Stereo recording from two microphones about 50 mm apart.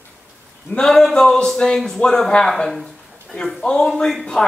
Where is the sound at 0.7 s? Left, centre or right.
Centre.